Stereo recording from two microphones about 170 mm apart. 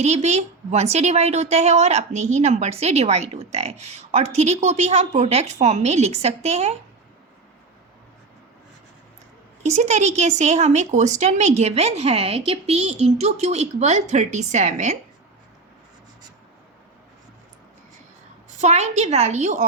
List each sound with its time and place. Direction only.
0.0 s a woman's voice: 40° right (ahead or behind)
9.6 s a woman's voice: 40° right (ahead or behind)
18.6 s a woman's voice: 40° right (ahead or behind)